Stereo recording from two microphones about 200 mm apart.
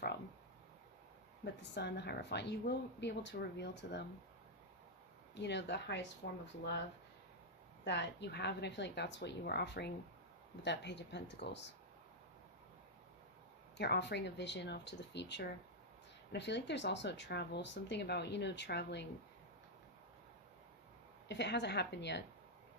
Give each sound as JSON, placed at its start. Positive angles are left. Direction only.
{"t": 1.7, "sound": "speech", "side_deg": 55}
{"t": 5.3, "sound": "speech", "side_deg": 60}
{"t": 7.9, "sound": "speech", "side_deg": 60}
{"t": 13.7, "sound": "speech", "side_deg": 55}
{"t": 21.2, "sound": "speech", "side_deg": 60}